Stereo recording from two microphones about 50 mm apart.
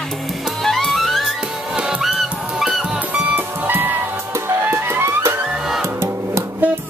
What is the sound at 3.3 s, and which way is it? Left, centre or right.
Music, right.